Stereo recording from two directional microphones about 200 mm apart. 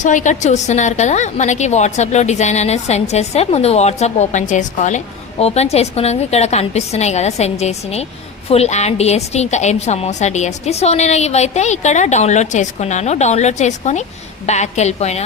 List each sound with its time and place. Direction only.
0.0 s a woman's voice: 40° left (ahead or behind)